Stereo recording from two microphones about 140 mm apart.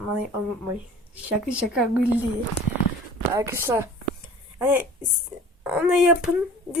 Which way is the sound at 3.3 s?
20° right (ahead or behind).